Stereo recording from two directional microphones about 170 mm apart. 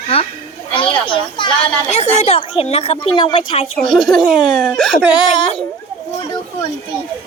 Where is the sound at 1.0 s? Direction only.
30° left (ahead or behind).